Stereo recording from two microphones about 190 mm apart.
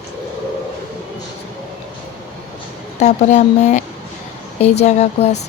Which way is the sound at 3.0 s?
35° left (ahead or behind).